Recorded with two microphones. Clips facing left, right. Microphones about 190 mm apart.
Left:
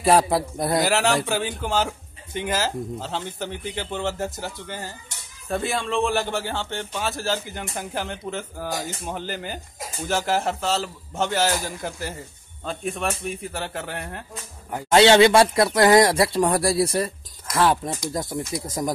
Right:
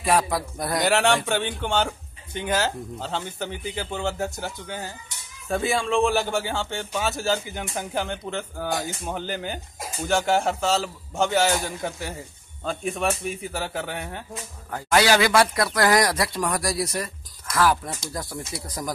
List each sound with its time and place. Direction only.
0.0 s speech: 35° left (ahead or behind)
0.7 s speech: centre (ahead or behind)
14.7 s speech: 20° left (ahead or behind)